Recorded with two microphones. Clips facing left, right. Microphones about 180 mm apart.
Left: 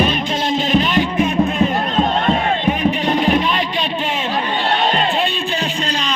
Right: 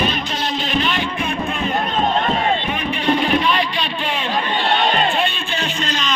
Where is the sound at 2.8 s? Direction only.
40° left (ahead or behind).